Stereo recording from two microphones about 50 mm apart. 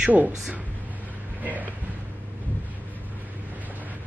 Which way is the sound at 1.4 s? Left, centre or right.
Right.